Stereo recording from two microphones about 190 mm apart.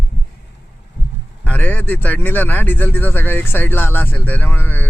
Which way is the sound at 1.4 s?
10° left (ahead or behind).